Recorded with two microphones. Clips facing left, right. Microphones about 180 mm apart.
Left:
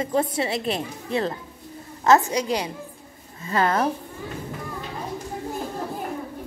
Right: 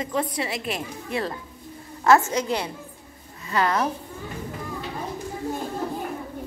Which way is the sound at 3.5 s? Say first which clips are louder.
Left 1 dB; 30° left (ahead or behind).